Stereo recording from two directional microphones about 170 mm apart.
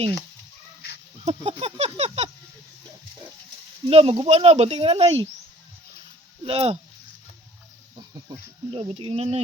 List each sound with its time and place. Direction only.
1.2 s speech: 40° right (ahead or behind)
3.8 s speech: 35° right (ahead or behind)
6.4 s speech: 35° right (ahead or behind)
8.7 s speech: 35° right (ahead or behind)